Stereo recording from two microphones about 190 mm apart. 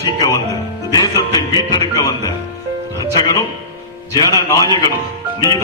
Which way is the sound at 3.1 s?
20° left (ahead or behind).